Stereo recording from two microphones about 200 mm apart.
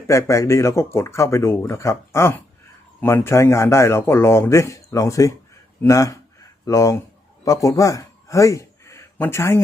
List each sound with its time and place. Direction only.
0.1 s a man's voice: 15° left (ahead or behind)